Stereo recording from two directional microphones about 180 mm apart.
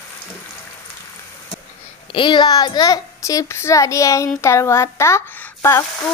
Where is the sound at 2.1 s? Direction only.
25° left (ahead or behind).